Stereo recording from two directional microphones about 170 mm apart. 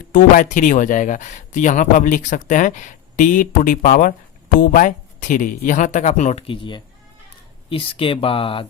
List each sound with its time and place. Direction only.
0.1 s speech: 50° left (ahead or behind); by 8.6 s 30° left (ahead or behind)